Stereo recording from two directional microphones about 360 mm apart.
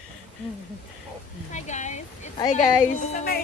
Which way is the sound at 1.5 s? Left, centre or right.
Centre.